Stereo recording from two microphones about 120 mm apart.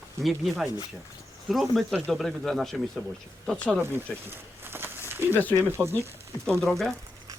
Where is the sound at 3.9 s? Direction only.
20° right (ahead or behind).